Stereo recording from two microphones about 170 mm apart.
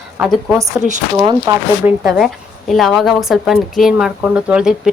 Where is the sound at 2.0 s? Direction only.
Centre (ahead or behind).